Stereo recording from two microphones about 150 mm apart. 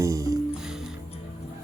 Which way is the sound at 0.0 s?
20° right (ahead or behind).